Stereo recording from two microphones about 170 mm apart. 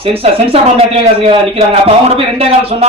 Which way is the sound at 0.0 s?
35° right (ahead or behind).